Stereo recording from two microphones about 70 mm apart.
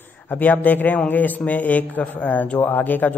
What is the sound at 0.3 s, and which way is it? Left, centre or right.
A man's voice, left.